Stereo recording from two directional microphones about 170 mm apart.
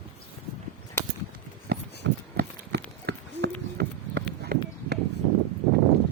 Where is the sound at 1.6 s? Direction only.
80° right.